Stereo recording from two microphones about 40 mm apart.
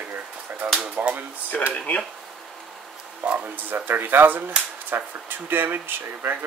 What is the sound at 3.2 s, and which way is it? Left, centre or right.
Speech, right.